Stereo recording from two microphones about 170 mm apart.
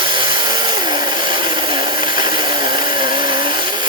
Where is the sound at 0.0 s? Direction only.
30° right (ahead or behind).